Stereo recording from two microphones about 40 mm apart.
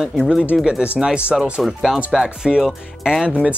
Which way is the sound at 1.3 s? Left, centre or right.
Centre.